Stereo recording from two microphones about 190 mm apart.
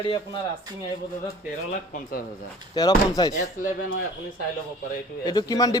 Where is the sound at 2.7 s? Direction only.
20° left (ahead or behind).